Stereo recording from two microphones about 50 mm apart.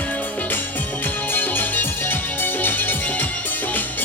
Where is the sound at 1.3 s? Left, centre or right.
Left.